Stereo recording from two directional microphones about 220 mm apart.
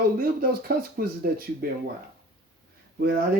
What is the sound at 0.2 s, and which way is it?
Speech, 40° right (ahead or behind).